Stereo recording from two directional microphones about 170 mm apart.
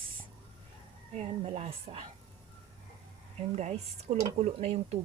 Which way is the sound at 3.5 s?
40° right (ahead or behind).